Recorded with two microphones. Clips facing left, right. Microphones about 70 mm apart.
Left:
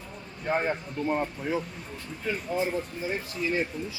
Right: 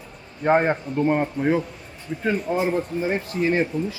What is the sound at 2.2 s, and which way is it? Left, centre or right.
Speech, right.